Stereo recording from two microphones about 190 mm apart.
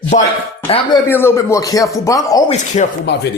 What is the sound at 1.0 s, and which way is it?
Speech, 10° left (ahead or behind).